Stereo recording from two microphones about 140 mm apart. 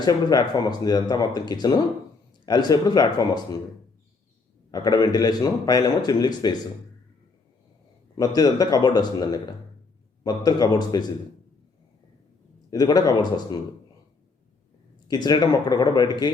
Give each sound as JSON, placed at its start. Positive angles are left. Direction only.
{"t": 0.0, "sound": "a man's voice", "side_deg": 30}
{"t": 4.7, "sound": "a man's voice", "side_deg": 30}
{"t": 8.4, "sound": "a man's voice", "side_deg": 30}
{"t": 12.7, "sound": "a man's voice", "side_deg": 30}
{"t": 15.0, "sound": "a man's voice", "side_deg": 30}